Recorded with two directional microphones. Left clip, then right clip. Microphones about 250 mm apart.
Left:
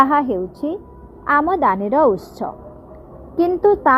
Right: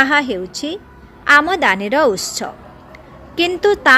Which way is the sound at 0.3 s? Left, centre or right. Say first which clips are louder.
Even; centre.